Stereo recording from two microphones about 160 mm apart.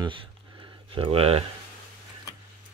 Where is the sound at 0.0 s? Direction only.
30° right (ahead or behind).